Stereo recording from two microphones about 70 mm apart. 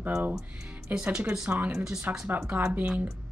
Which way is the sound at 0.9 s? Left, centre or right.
Centre.